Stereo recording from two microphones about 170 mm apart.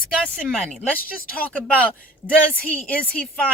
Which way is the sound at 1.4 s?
10° left (ahead or behind).